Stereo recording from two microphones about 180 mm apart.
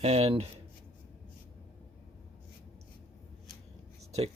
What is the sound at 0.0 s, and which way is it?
Speech, 35° right (ahead or behind).